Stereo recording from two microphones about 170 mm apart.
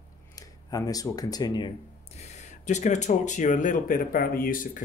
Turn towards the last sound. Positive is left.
turn(degrees=55)  # may be behind; listen again after turning